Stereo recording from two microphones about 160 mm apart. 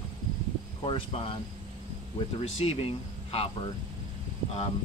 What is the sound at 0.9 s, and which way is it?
Speech, 35° left (ahead or behind).